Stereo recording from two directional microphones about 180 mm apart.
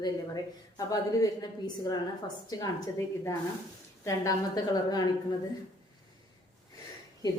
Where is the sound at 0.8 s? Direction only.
20° left (ahead or behind).